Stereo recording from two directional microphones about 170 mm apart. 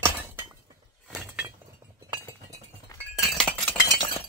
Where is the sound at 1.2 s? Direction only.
10° right (ahead or behind).